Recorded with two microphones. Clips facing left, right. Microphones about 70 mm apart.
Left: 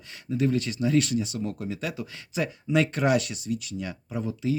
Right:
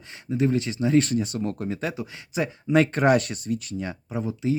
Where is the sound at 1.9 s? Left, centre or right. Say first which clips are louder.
Right 2 dB; right.